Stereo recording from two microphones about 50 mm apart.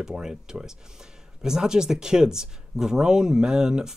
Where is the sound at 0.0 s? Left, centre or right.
Centre.